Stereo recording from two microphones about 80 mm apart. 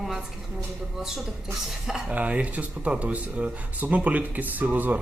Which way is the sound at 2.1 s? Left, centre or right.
Centre.